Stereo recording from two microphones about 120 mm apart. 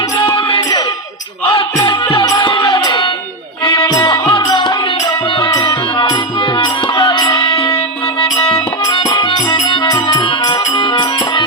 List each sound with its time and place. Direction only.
0.3 s music: 45° left (ahead or behind)
1.8 s music: 45° left (ahead or behind)
2.7 s a sound: 40° left (ahead or behind)
3.6 s music: 40° left (ahead or behind)